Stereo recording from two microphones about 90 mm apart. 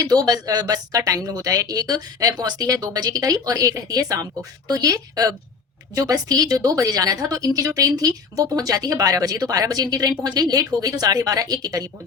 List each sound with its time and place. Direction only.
0.1 s speech: 45° right (ahead or behind)